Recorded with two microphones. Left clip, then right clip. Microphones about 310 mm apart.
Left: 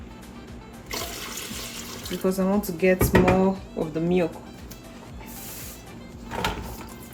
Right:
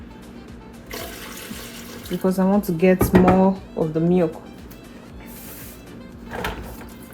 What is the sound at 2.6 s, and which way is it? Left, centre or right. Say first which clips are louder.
Speech: right 2 dB; centre.